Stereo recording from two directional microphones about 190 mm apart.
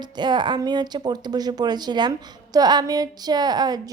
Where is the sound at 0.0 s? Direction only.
25° right (ahead or behind).